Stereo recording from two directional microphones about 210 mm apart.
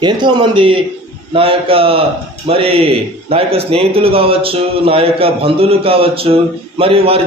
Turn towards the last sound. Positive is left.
turn(degrees=-25)  # may be behind; listen again after turning